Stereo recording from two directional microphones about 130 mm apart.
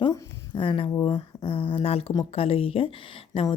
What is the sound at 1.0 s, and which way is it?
A woman's voice, 40° left (ahead or behind).